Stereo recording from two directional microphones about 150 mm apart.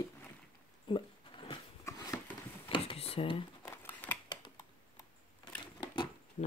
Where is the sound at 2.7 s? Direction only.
40° left (ahead or behind).